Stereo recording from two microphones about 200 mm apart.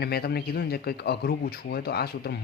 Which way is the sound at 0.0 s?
50° left (ahead or behind).